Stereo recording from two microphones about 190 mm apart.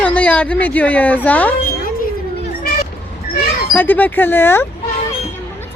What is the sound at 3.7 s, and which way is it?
Speech, 10° left (ahead or behind).